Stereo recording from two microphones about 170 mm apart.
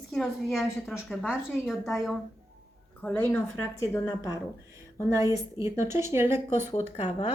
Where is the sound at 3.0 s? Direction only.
10° left (ahead or behind).